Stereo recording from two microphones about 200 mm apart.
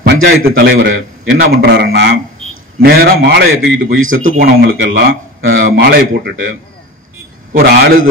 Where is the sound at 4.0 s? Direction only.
80° right.